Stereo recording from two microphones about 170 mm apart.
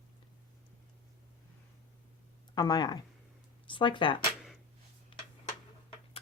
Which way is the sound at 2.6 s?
25° left (ahead or behind).